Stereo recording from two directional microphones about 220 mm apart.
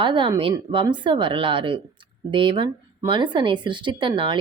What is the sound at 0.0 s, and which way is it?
Speech, 20° right (ahead or behind).